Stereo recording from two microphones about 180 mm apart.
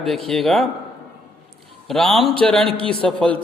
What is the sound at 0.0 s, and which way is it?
Speech, centre (ahead or behind).